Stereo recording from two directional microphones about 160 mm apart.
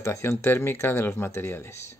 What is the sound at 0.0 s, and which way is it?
Speech, 15° left (ahead or behind).